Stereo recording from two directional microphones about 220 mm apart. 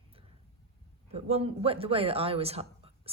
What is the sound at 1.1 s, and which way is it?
Speech, 30° right (ahead or behind).